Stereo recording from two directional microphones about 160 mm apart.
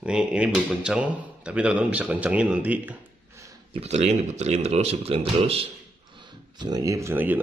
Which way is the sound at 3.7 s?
40° right (ahead or behind).